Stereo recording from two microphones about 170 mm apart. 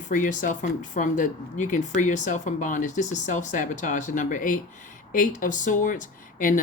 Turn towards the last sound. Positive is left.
turn(degrees=50)  # may be behind; listen again after turning